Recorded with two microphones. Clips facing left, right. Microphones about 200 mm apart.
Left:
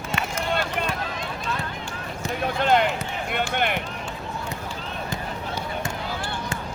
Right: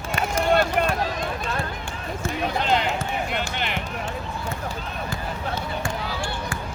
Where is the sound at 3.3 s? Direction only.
55° left (ahead or behind).